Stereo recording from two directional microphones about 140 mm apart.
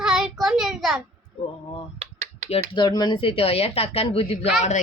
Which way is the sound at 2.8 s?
30° left (ahead or behind).